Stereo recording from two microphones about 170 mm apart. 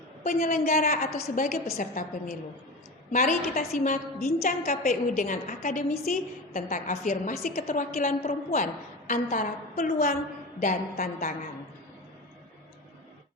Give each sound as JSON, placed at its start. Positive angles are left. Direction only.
{"t": 0.2, "sound": "a woman's voice", "side_deg": 55}